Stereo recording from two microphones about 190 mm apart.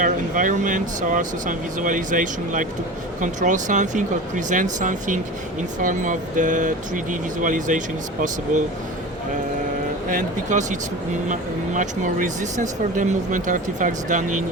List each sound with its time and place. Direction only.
0.0 s speech: 45° right (ahead or behind)
10.1 s speech: 40° right (ahead or behind)